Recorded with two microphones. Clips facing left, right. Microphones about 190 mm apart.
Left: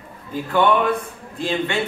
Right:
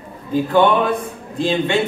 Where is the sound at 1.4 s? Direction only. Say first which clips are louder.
Right 5 dB; 30° right (ahead or behind).